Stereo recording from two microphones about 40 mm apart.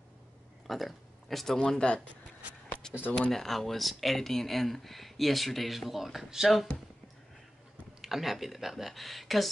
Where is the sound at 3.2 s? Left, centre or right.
Centre.